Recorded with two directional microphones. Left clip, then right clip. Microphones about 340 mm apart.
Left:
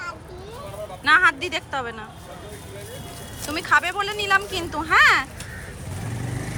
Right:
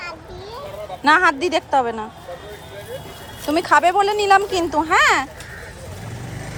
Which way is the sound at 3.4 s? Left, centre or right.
Centre.